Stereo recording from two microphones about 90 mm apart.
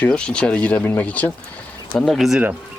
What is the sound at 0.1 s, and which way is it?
Speech, 10° left (ahead or behind).